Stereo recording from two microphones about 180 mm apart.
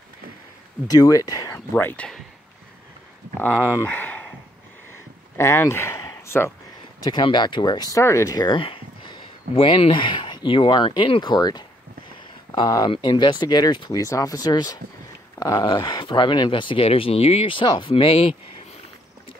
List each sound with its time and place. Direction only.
0.8 s speech: 20° left (ahead or behind)
1.7 s speech: 10° left (ahead or behind)
3.3 s speech: 10° left (ahead or behind)
5.4 s speech: 15° left (ahead or behind)
7.0 s speech: 25° left (ahead or behind)